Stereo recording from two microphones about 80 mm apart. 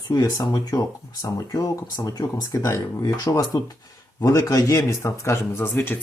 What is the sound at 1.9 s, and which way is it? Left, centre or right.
Speech, left.